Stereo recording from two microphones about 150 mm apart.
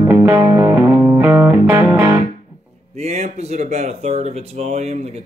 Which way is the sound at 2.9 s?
45° right (ahead or behind).